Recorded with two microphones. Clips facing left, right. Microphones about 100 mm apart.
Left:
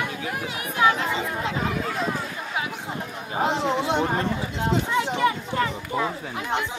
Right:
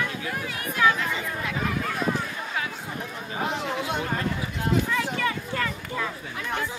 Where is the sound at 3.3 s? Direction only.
25° left (ahead or behind).